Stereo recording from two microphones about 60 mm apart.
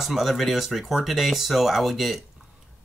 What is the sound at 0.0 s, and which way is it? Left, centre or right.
Speech, centre.